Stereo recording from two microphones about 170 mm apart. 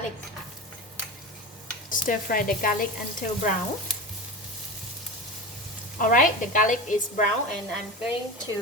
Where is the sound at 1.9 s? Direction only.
55° left (ahead or behind).